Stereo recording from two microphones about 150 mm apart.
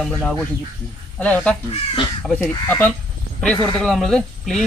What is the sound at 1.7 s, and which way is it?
Speech, 35° left (ahead or behind).